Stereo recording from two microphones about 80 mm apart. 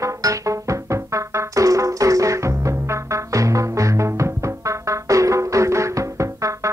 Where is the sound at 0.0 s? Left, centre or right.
Right.